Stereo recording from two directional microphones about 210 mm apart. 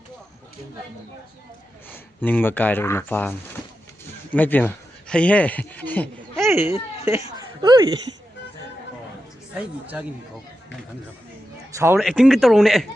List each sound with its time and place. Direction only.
1.9 s speech: 10° left (ahead or behind)
6.4 s a child's voice: 10° right (ahead or behind)
9.6 s speech: 5° right (ahead or behind)
11.9 s speech: centre (ahead or behind)